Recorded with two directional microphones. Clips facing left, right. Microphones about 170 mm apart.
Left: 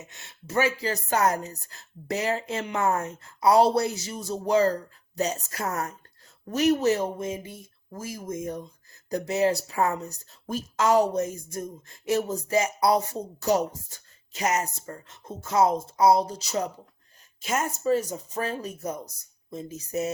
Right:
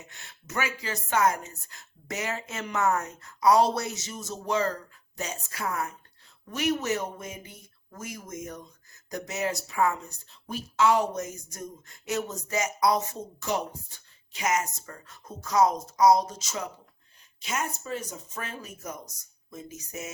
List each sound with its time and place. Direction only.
0.0 s speech: 20° left (ahead or behind)
17.4 s speech: 45° left (ahead or behind); by 20.1 s 30° left (ahead or behind)